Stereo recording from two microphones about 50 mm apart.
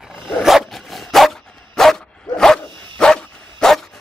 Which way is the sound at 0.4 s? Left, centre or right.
Centre.